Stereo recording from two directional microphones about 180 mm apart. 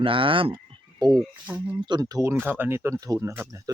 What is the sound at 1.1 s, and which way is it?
Speech, 10° right (ahead or behind).